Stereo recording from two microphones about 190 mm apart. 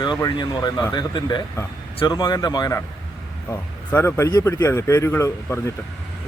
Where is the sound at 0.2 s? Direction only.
20° left (ahead or behind).